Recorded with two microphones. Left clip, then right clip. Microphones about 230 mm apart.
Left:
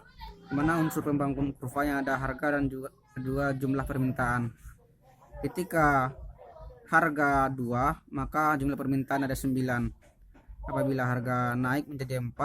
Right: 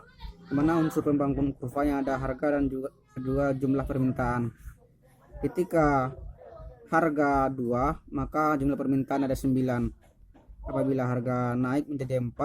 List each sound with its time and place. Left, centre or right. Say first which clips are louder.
0.5 s speech: right 3 dB; left